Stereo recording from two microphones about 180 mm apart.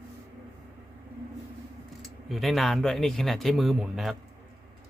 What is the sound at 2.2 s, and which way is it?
Speech, centre (ahead or behind).